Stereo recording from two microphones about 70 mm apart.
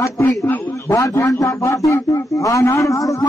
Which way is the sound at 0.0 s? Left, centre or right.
Left.